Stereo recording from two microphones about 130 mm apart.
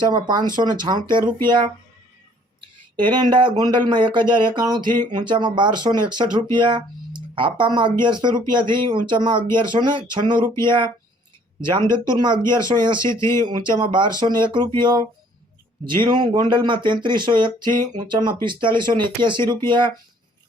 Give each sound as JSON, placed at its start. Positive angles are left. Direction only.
{"t": 0.0, "sound": "speech", "side_deg": -35}
{"t": 2.9, "sound": "speech", "side_deg": -35}
{"t": 13.0, "sound": "speech", "side_deg": 20}
{"t": 13.4, "sound": "speech", "side_deg": -35}